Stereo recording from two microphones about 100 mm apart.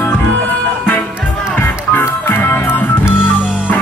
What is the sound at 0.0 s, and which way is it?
Music, 15° left (ahead or behind).